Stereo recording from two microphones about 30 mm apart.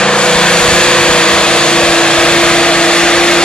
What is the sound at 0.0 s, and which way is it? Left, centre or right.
Vehicle, left.